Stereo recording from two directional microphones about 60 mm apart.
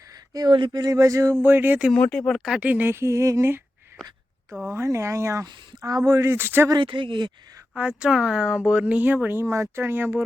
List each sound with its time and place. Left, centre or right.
0.3 s speech: right
1.4 s speech: right
2.0 s speech: centre
2.2 s speech: centre
2.6 s speech: right
2.8 s a sound: right
4.6 s speech: right
7.8 s speech: centre
9.4 s speech: right